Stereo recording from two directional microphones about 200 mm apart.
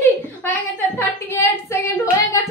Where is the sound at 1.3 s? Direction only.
15° left (ahead or behind).